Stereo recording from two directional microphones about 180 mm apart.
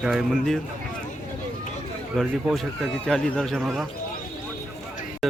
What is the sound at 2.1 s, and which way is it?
A man's voice, centre (ahead or behind).